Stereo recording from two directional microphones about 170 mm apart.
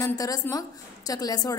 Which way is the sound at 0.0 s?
20° left (ahead or behind).